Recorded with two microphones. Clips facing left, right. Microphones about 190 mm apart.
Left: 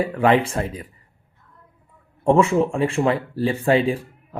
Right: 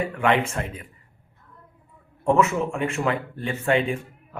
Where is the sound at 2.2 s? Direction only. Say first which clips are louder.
Left 4 dB; 30° left (ahead or behind).